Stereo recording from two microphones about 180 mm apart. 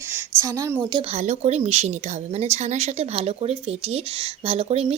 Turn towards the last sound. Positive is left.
turn(degrees=-35)  # may be behind; listen again after turning